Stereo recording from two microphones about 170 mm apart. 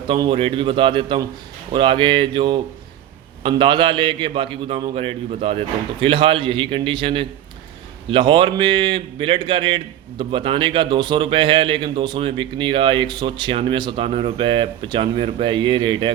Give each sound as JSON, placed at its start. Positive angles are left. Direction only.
{"t": 0.2, "sound": "a man's voice", "side_deg": -30}